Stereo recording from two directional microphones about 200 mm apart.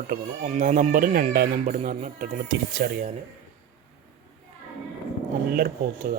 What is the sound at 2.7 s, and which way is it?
Speech, 60° right (ahead or behind).